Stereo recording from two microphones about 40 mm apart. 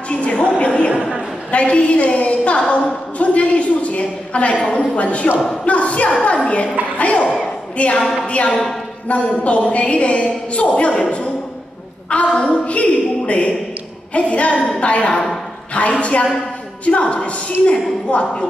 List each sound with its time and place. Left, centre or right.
0.1 s a sound: left
0.9 s a sound: centre
1.5 s a woman's voice: left
8.0 s a woman's voice: centre
9.1 s a woman's voice: left
12.4 s a woman's voice: left